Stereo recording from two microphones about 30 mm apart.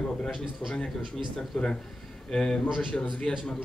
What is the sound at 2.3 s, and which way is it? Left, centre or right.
Speech, left.